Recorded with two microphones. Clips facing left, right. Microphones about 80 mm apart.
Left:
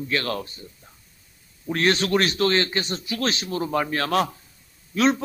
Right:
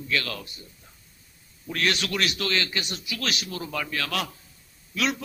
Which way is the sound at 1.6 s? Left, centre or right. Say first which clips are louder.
Left 5 dB; left.